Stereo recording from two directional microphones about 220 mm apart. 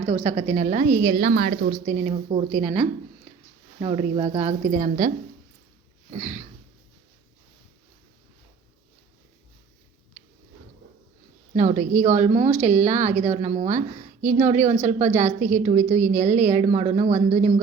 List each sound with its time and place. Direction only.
0.0 s a woman's voice: 25° right (ahead or behind); by 1.7 s 45° right (ahead or behind)
1.9 s a woman's voice: 25° right (ahead or behind)
11.5 s a woman's voice: 30° right (ahead or behind)